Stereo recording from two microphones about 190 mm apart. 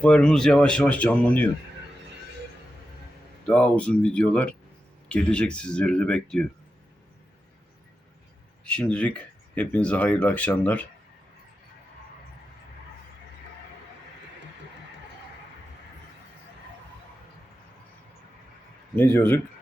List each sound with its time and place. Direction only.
0.0 s speech: 5° left (ahead or behind)
3.4 s speech: 5° left (ahead or behind)
8.6 s speech: 5° left (ahead or behind)
18.9 s speech: 10° left (ahead or behind)